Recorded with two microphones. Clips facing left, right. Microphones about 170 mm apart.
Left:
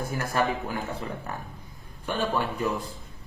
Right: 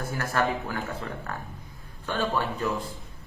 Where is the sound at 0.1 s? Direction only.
15° left (ahead or behind).